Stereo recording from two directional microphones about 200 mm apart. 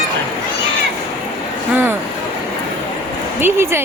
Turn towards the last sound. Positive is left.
turn(degrees=-10)  # may be behind; listen again after turning